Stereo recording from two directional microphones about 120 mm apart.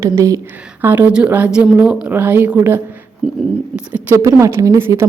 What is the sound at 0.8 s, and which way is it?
A woman's voice, 15° right (ahead or behind).